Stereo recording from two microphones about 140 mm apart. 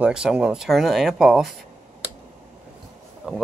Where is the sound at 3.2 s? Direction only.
5° right (ahead or behind).